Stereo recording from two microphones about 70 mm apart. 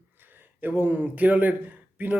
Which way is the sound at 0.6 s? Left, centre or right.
Right.